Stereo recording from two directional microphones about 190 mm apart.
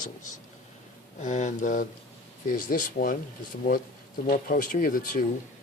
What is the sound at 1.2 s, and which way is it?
Speech, 40° left (ahead or behind).